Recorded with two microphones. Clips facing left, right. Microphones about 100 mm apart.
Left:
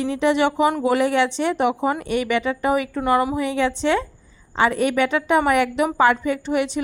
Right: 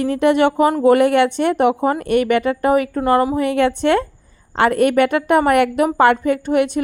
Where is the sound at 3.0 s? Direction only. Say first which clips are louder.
Right 4 dB; 35° right (ahead or behind).